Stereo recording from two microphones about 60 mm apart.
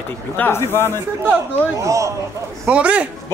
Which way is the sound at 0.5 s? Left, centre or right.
Left.